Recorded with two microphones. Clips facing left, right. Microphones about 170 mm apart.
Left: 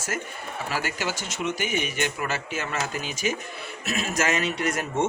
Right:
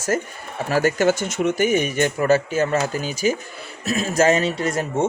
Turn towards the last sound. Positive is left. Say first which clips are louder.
# right 4 dB
turn(degrees=-30)  # may be behind; listen again after turning